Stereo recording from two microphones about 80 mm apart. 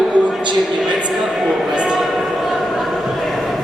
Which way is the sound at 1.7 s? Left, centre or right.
Centre.